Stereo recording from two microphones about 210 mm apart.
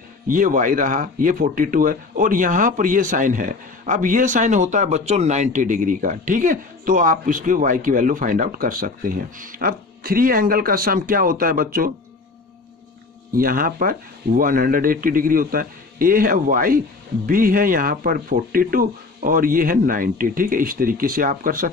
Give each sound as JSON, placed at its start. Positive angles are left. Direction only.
{"t": 0.3, "sound": "speech", "side_deg": -40}
{"t": 13.4, "sound": "speech", "side_deg": -45}